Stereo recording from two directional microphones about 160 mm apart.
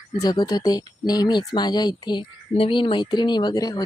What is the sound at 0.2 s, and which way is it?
Speech, 25° left (ahead or behind).